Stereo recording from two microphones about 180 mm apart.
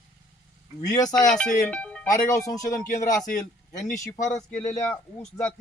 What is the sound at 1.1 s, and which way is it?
Speech, 5° left (ahead or behind).